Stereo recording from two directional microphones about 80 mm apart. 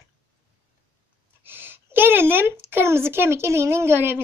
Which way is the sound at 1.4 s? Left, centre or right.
Right.